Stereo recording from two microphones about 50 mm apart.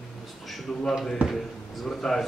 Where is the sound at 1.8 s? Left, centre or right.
Centre.